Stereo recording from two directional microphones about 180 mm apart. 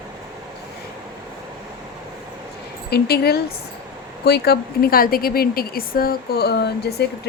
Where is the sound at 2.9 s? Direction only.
60° left (ahead or behind).